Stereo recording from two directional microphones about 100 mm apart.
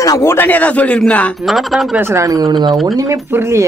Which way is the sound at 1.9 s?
25° right (ahead or behind).